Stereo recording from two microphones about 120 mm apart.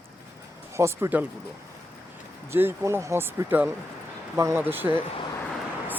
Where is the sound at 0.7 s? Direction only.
20° right (ahead or behind).